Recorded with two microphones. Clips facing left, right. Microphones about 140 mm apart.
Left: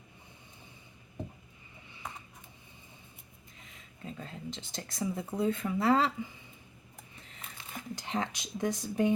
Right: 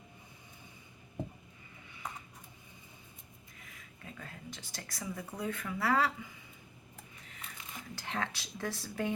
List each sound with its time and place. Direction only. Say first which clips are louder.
3.6 s speech: left 6 dB; 25° left (ahead or behind)
7.2 s a sound: left 2 dB; 30° left (ahead or behind)
7.9 s speech: left 3 dB; 20° left (ahead or behind)